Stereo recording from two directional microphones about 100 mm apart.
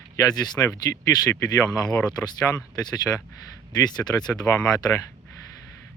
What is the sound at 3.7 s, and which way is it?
Speech, 45° left (ahead or behind).